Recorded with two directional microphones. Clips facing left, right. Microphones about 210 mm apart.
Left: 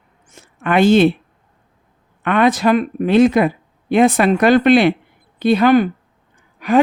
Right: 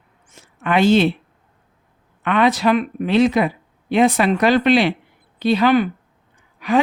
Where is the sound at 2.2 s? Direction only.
50° left (ahead or behind).